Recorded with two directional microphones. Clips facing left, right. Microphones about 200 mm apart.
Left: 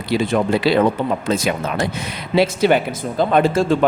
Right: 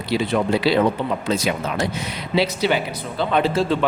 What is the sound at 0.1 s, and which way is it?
Speech, 50° left (ahead or behind).